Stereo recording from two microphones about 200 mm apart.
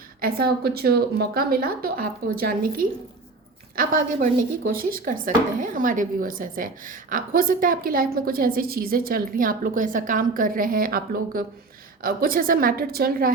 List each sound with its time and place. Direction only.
0.2 s speech: 50° right (ahead or behind)
3.8 s speech: 45° right (ahead or behind)